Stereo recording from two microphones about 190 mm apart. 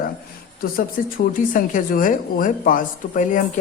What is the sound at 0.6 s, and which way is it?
Speech, 50° left (ahead or behind).